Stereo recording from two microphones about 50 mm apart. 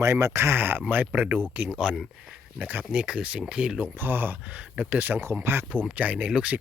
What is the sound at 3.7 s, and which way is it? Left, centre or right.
Speech, right.